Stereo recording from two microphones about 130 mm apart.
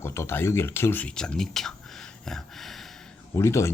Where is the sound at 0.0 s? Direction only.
20° left (ahead or behind); by 1.7 s 5° left (ahead or behind).